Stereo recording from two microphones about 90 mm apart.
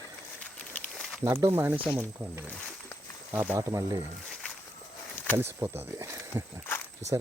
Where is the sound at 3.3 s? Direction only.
15° right (ahead or behind).